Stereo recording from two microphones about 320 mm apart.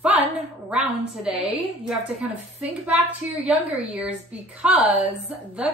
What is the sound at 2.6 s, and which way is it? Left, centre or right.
A woman's voice, centre.